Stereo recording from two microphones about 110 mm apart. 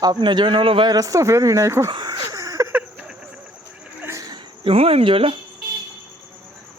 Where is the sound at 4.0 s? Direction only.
30° right (ahead or behind).